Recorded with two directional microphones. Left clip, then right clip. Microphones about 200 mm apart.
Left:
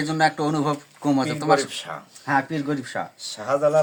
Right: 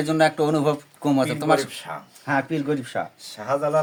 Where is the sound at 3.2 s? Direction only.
Centre (ahead or behind).